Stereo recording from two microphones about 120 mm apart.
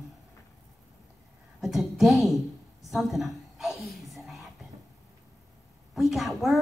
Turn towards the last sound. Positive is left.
turn(degrees=0)  # may be behind; listen again after turning